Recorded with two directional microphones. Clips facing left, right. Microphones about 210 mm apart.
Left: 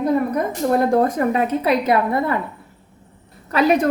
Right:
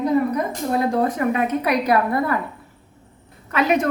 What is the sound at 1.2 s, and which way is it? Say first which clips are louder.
A woman's voice: left 2 dB; 30° left (ahead or behind).